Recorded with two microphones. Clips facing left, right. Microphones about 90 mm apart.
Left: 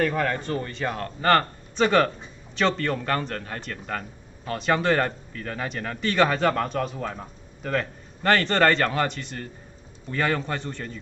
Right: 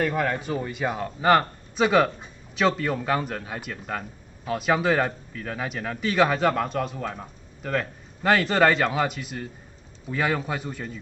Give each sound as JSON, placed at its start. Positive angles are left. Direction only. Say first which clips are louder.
{"t": 0.0, "sound": "a man's voice", "louder": "left 1 dB", "side_deg": -5}